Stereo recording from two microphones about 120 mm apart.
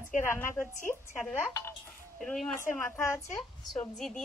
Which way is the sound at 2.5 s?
20° left (ahead or behind).